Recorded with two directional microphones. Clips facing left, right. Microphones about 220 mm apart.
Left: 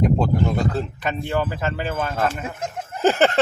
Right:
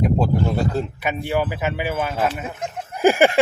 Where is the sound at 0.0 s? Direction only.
10° right (ahead or behind).